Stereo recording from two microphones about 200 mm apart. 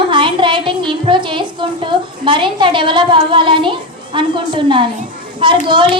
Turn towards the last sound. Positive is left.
turn(degrees=-25)  # may be behind; listen again after turning